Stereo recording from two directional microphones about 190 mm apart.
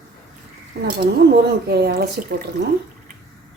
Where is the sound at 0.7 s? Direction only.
60° right (ahead or behind).